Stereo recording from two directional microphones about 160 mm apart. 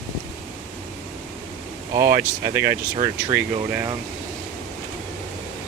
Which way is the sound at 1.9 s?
20° right (ahead or behind).